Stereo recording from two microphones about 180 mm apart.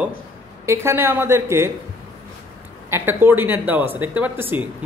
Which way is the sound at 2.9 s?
10° right (ahead or behind).